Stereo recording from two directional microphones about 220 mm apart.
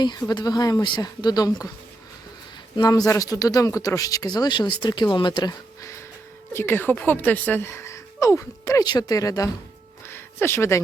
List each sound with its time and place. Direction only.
0.0 s a woman's voice: 20° left (ahead or behind)
2.7 s a woman's voice: 15° left (ahead or behind)
10.1 s a sound: 10° left (ahead or behind)